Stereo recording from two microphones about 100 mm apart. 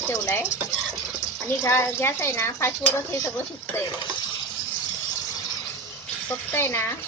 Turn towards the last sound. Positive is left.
turn(degrees=25)  # may be behind; listen again after turning